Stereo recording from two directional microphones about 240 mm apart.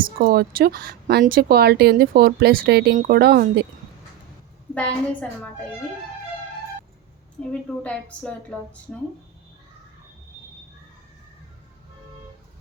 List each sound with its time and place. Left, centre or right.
0.0 s speech: right
4.7 s speech: centre
7.5 s speech: centre